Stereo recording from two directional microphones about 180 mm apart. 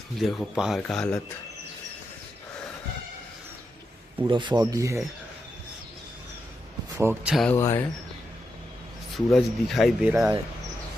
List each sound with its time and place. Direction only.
0.2 s speech: centre (ahead or behind)
4.3 s speech: 25° right (ahead or behind)
6.9 s a man's voice: 10° right (ahead or behind)
7.3 s speech: 10° left (ahead or behind)
9.1 s speech: centre (ahead or behind)